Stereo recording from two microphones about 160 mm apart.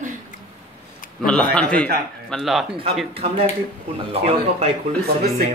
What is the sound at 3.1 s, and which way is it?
Speech, 40° right (ahead or behind).